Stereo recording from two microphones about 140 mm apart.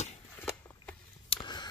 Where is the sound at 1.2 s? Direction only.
35° left (ahead or behind).